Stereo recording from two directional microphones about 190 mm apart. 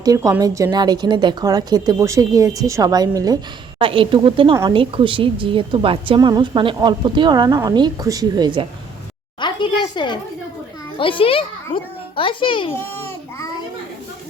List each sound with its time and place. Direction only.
0.0 s a woman's voice: 20° right (ahead or behind)
9.4 s a sound: 25° left (ahead or behind)
10.9 s a child's voice: 25° left (ahead or behind)
12.7 s babbling: 10° left (ahead or behind)